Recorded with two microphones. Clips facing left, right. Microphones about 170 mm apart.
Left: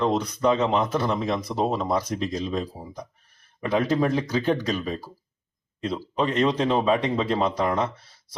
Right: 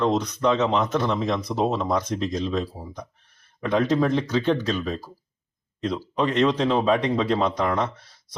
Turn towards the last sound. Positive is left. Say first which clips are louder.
# even
turn(degrees=30)  # may be behind; listen again after turning